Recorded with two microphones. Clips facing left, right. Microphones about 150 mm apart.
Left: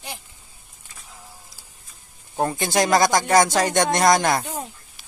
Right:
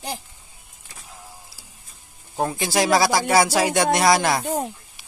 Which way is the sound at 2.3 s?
Centre (ahead or behind).